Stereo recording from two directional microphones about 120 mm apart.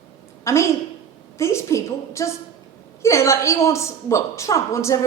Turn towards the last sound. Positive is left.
turn(degrees=25)  # may be behind; listen again after turning